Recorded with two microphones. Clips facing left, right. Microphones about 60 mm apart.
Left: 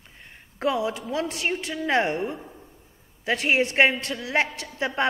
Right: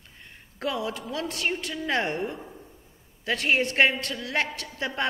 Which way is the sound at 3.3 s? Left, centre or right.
Left.